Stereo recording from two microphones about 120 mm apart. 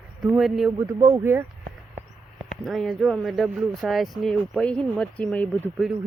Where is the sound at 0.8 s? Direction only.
25° right (ahead or behind).